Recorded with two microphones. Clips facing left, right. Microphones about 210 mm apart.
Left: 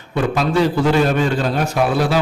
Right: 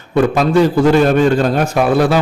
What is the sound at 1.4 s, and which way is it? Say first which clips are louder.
Speech: right 5 dB; 50° right (ahead or behind).